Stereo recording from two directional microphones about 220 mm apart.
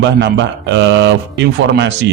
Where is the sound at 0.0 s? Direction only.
55° right (ahead or behind).